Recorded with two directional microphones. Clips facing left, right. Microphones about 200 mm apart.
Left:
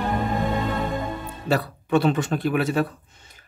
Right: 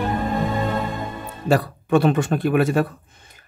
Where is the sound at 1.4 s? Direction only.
50° right (ahead or behind).